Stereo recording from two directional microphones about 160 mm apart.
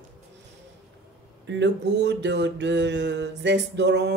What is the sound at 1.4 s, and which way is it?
Speech, 90° right.